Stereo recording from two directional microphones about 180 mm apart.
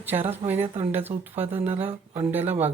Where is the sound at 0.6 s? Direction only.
30° right (ahead or behind).